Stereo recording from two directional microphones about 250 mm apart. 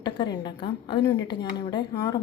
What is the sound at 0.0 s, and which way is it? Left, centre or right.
A woman's voice, centre.